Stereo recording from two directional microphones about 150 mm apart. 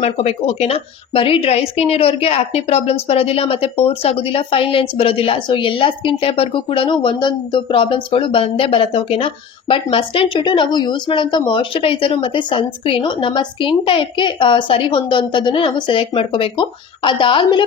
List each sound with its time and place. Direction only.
0.0 s a woman's voice: 45° left (ahead or behind)